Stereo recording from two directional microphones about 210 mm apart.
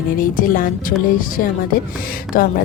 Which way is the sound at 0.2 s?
40° left (ahead or behind).